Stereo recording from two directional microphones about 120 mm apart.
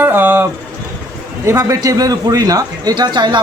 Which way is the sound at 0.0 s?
15° right (ahead or behind).